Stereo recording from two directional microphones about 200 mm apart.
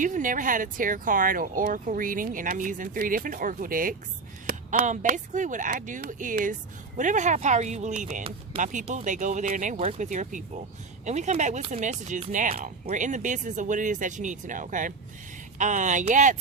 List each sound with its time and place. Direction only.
0.0 s speech: 40° right (ahead or behind)